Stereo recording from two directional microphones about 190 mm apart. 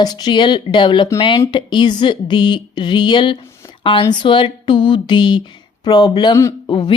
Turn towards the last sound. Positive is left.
turn(degrees=20)  # may be behind; listen again after turning